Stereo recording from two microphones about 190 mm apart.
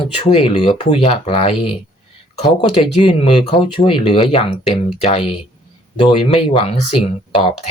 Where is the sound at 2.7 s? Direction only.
30° left (ahead or behind).